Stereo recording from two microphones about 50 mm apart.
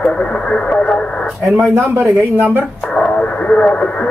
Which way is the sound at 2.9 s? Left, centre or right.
Left.